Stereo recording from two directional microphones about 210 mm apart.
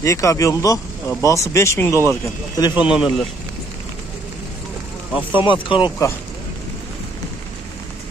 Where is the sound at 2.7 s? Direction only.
5° right (ahead or behind).